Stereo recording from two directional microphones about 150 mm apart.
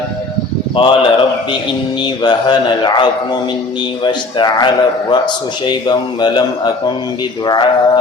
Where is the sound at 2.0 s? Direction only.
30° left (ahead or behind).